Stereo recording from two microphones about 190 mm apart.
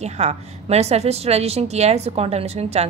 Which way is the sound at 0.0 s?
35° right (ahead or behind).